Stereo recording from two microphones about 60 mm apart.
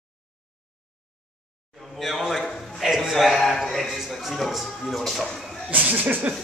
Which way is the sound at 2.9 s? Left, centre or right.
Centre.